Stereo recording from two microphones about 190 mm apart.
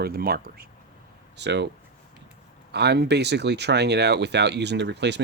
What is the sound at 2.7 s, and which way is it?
Speech, 60° right (ahead or behind).